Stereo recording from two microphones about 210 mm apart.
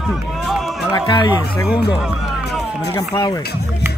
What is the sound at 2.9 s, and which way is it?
Speech, 20° left (ahead or behind).